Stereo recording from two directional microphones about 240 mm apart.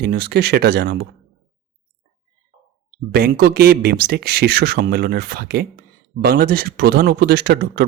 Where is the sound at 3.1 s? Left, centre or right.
Right.